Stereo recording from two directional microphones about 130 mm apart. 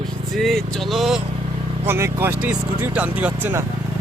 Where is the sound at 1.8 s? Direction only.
20° right (ahead or behind).